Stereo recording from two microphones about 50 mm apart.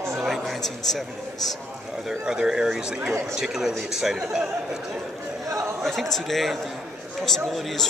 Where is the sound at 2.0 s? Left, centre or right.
Centre.